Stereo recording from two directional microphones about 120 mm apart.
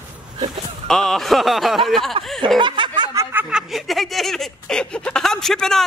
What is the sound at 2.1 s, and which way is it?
Speech, 45° right (ahead or behind).